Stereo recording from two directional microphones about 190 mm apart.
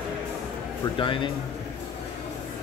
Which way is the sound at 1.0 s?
25° left (ahead or behind).